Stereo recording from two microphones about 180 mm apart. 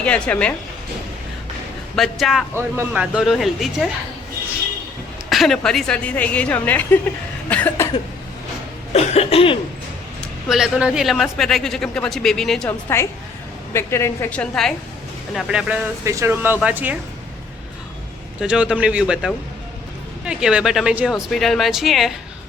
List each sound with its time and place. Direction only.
0.0 s a woman's voice: 5° left (ahead or behind)
2.0 s speech: centre (ahead or behind)
5.3 s a woman's voice: centre (ahead or behind)
7.5 s cough: 10° left (ahead or behind)
8.9 s cough: 35° left (ahead or behind)
10.5 s speech: 5° right (ahead or behind)
13.7 s a woman's voice: 15° left (ahead or behind)
15.4 s speech: 5° right (ahead or behind)
18.3 s speech: 5° right (ahead or behind)